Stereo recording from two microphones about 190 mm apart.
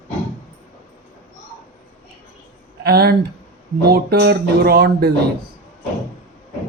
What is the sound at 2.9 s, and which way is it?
Speech, 55° right (ahead or behind).